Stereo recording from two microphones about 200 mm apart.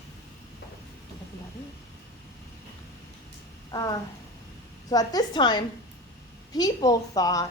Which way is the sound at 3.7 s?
20° left (ahead or behind).